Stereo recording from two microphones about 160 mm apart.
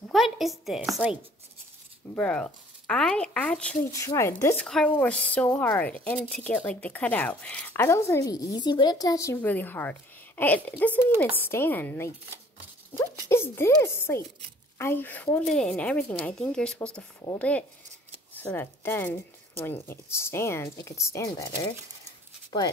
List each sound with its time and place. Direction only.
0.1 s speech: centre (ahead or behind)
2.1 s a woman's voice: 5° left (ahead or behind)
4.0 s a woman's voice: 20° left (ahead or behind)